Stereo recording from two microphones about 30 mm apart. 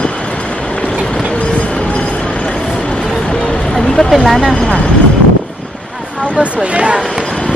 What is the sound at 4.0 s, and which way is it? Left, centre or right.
Vehicle, centre.